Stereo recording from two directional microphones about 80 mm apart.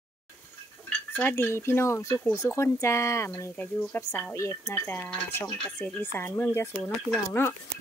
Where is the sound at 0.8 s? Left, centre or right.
Centre.